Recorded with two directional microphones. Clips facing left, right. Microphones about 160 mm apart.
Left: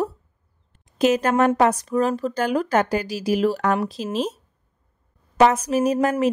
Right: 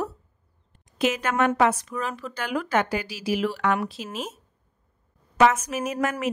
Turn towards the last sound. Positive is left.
turn(degrees=30)  # may be behind; listen again after turning